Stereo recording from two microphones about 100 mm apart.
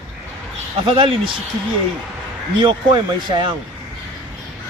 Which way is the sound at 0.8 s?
60° right (ahead or behind).